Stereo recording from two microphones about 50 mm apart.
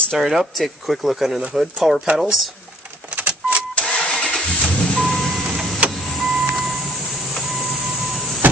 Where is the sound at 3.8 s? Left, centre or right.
Centre.